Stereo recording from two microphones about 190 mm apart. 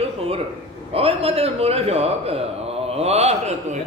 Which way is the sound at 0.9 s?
30° right (ahead or behind).